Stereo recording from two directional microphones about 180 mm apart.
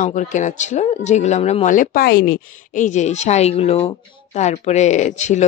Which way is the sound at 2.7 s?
40° left (ahead or behind).